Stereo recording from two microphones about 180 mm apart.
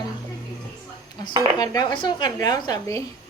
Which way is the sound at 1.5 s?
20° left (ahead or behind).